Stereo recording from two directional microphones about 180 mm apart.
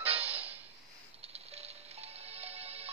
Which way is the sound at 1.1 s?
35° right (ahead or behind).